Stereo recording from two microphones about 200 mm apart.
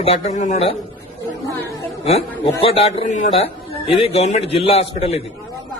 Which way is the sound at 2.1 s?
30° left (ahead or behind).